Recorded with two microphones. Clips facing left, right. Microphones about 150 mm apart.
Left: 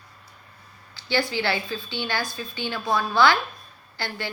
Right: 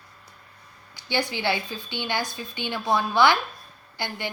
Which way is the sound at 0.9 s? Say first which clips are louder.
Left 2 dB; 20° right (ahead or behind).